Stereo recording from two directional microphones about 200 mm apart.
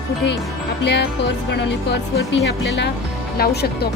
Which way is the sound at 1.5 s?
60° left (ahead or behind).